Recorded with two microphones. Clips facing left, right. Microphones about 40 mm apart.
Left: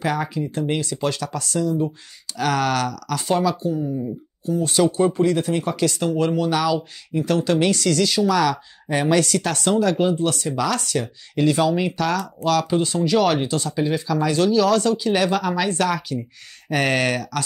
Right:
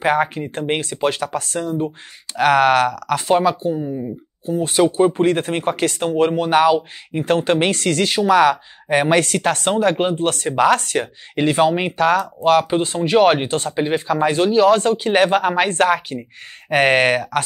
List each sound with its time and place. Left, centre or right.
0.0 s speech: right